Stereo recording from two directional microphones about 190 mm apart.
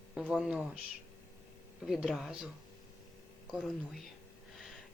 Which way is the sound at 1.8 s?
Centre (ahead or behind).